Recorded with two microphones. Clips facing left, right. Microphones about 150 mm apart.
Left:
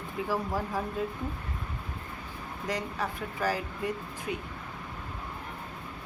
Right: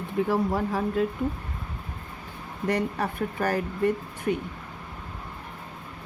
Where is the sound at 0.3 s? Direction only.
65° right (ahead or behind).